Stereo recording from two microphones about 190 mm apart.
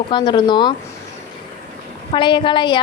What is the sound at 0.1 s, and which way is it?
Speech, 25° left (ahead or behind).